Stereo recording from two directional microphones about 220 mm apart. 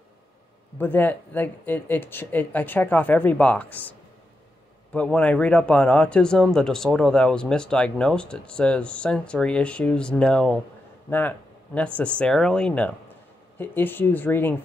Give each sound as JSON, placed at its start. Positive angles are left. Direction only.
{"t": 0.7, "sound": "speech", "side_deg": 10}
{"t": 4.9, "sound": "speech", "side_deg": 5}